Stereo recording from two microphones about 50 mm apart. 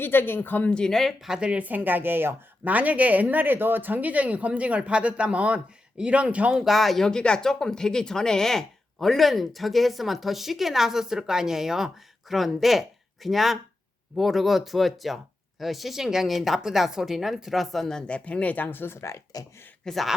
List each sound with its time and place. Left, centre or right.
0.0 s speech: left
0.7 s speech: centre
1.4 s speech: right
1.6 s speech: right
2.6 s speech: right
6.6 s speech: centre
7.1 s speech: centre
17.9 s speech: left
18.9 s speech: left
19.8 s speech: centre